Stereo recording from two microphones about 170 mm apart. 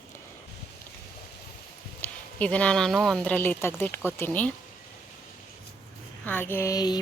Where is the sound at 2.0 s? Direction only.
5° left (ahead or behind).